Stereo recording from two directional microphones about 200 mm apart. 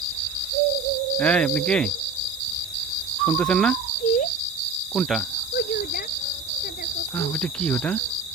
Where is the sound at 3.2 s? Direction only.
5° left (ahead or behind).